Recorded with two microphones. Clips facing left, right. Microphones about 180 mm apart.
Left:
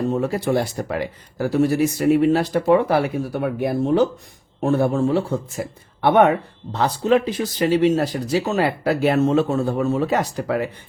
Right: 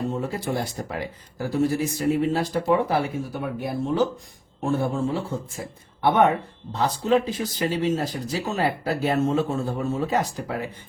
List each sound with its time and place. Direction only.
0.1 s speech: 70° left (ahead or behind)